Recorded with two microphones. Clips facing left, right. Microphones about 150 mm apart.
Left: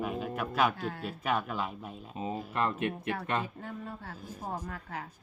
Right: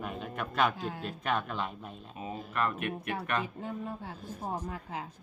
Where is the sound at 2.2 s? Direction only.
25° left (ahead or behind).